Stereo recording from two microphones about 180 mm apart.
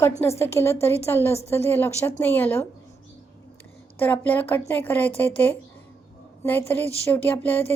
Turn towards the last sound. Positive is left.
turn(degrees=10)  # may be behind; listen again after turning